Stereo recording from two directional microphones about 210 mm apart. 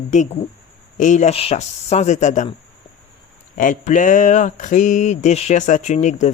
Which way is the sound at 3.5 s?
35° left (ahead or behind).